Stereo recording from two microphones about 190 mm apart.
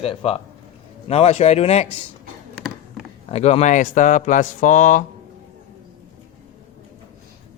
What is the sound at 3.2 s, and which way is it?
Speech, 30° left (ahead or behind).